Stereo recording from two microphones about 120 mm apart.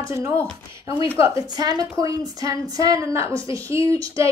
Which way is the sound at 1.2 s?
30° right (ahead or behind).